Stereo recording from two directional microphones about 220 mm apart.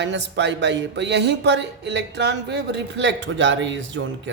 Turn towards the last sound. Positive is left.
turn(degrees=-55)  # may be behind; listen again after turning